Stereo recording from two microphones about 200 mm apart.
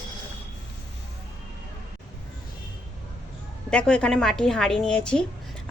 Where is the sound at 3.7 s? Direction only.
5° left (ahead or behind).